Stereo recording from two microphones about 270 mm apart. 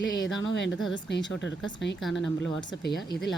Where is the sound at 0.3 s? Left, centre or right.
Left.